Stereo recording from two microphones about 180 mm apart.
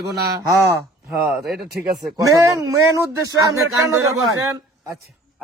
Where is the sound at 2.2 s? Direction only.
15° right (ahead or behind).